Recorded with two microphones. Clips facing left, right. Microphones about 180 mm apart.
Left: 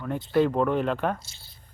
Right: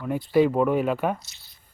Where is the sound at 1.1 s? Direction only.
30° left (ahead or behind).